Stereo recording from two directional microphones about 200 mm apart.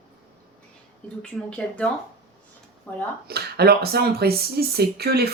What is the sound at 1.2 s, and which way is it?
Speech, 5° left (ahead or behind).